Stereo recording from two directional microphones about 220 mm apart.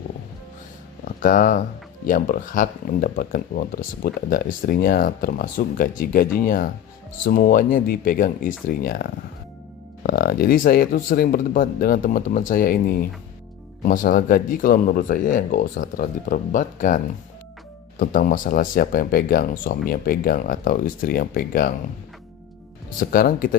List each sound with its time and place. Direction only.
1.0 s speech: 40° left (ahead or behind)
18.0 s speech: 40° left (ahead or behind)
23.0 s speech: 40° left (ahead or behind)